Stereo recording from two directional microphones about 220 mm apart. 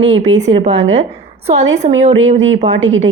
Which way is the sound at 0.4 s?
30° right (ahead or behind).